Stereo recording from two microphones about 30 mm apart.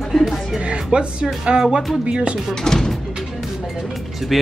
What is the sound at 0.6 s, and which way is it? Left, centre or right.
Speech, right.